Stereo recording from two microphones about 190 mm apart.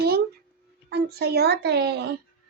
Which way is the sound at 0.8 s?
60° right (ahead or behind).